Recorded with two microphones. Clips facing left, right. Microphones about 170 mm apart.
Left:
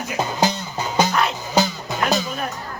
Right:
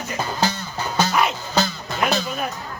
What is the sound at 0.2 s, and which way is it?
Music, 15° left (ahead or behind).